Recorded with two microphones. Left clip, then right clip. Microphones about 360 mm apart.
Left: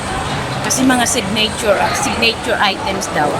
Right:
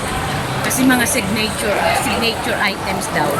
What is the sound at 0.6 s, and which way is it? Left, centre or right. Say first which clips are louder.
A woman's voice: left 2 dB; centre.